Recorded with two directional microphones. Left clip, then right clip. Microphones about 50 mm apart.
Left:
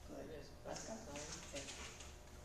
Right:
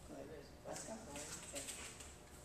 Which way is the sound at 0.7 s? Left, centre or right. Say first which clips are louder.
Even; centre.